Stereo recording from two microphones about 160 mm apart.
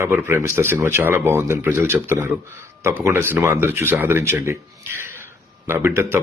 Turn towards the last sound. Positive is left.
turn(degrees=-15)  # may be behind; listen again after turning